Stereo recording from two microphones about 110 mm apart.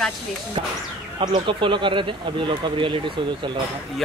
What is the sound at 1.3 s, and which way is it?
Speech, 50° right (ahead or behind).